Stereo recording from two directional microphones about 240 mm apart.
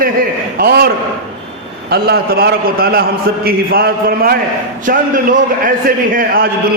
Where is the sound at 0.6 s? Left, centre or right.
Right.